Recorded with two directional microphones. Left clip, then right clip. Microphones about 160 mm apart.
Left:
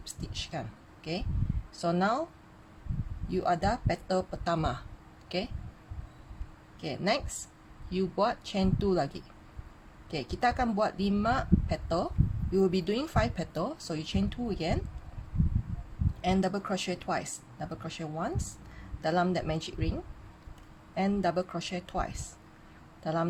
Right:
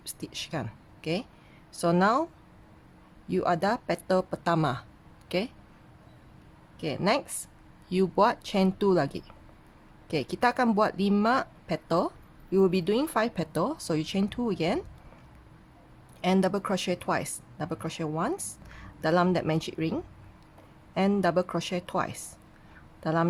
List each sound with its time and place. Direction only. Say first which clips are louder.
0.0 s speech: right 2 dB; 40° right (ahead or behind)
3.2 s speech: right 3 dB; 40° right (ahead or behind)
6.7 s speech: right 4 dB; 35° right (ahead or behind)
16.2 s speech: right 4 dB; 40° right (ahead or behind)